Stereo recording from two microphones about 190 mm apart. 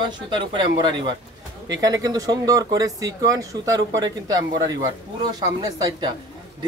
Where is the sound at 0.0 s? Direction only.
25° right (ahead or behind).